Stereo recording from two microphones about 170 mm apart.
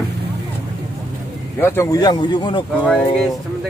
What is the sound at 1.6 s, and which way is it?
Speech, 20° left (ahead or behind).